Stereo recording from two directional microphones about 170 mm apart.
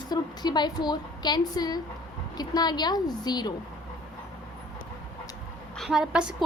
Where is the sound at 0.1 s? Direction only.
25° left (ahead or behind).